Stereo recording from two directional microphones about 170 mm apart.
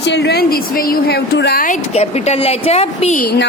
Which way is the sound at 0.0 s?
90° left.